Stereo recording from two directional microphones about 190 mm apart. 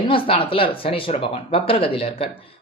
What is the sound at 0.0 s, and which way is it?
Speech, 30° left (ahead or behind).